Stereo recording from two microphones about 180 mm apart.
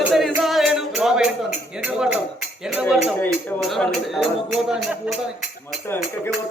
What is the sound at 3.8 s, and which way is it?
Music, centre (ahead or behind).